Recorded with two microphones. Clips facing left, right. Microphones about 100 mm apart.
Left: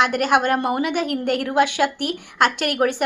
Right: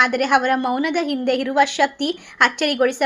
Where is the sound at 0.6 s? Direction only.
20° left (ahead or behind).